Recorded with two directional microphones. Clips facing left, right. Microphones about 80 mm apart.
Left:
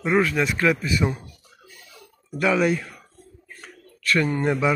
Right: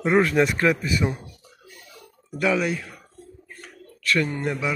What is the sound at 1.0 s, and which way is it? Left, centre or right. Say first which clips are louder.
Speech: left 2 dB; centre.